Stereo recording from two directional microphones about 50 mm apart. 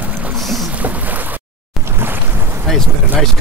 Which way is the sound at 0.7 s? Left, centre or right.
Right.